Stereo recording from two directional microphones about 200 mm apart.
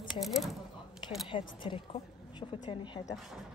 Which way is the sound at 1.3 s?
25° left (ahead or behind).